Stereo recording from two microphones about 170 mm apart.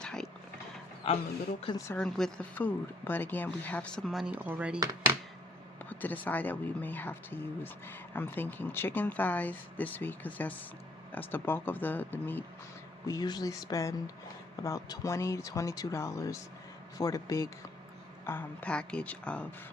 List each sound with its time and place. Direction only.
0.0 s mechanisms: 5° left (ahead or behind)
1.0 s speech: 30° left (ahead or behind)
1.9 s speech: 5° left (ahead or behind)
5.8 s speech: 10° left (ahead or behind)
13.1 s speech: 25° left (ahead or behind); by 19.5 s 5° left (ahead or behind)